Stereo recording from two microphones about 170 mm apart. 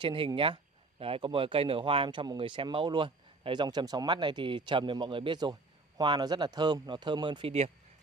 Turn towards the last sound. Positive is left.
turn(degrees=-35)  # may be behind; listen again after turning